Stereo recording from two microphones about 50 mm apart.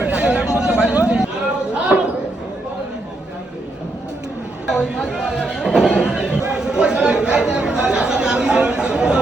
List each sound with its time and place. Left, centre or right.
0.0 s chatter: right
4.7 s chatter: centre